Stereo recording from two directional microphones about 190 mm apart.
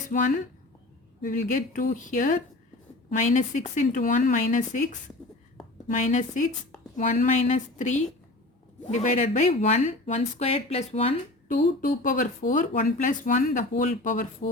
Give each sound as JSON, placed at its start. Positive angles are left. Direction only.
{"t": 0.1, "sound": "speech", "side_deg": 40}
{"t": 11.5, "sound": "speech", "side_deg": 45}